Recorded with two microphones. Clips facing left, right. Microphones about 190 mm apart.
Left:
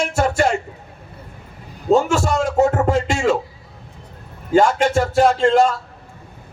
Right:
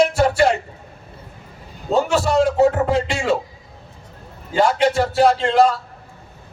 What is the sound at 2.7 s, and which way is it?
Speech, 45° left (ahead or behind).